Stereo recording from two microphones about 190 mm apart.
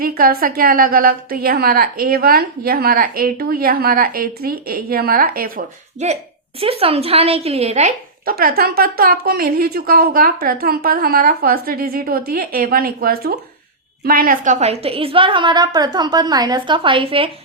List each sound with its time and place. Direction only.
0.0 s a woman's voice: 50° right (ahead or behind)
6.6 s a woman's voice: 30° right (ahead or behind)
8.2 s a woman's voice: 50° right (ahead or behind); by 17.3 s 30° right (ahead or behind)